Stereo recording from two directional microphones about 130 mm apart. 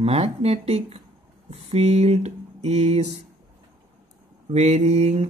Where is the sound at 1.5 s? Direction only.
55° right (ahead or behind).